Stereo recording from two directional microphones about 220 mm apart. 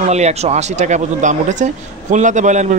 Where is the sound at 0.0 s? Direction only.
30° right (ahead or behind).